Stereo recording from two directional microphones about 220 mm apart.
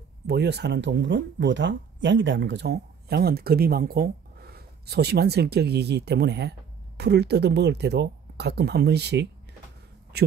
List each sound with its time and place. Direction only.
0.3 s speech: 50° right (ahead or behind)